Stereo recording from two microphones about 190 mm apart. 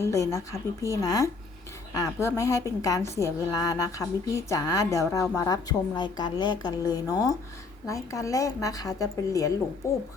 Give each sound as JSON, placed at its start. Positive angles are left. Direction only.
{"t": 0.0, "sound": "a woman's voice", "side_deg": 15}